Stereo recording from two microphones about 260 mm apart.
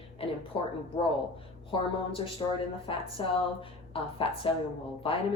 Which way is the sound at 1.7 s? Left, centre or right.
Centre.